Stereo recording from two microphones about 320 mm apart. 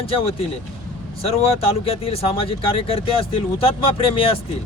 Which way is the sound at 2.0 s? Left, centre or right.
Centre.